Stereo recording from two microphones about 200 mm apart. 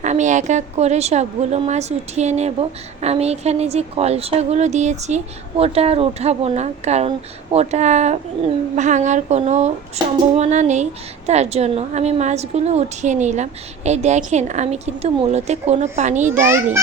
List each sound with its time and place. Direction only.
0.0 s a woman's voice: 35° right (ahead or behind)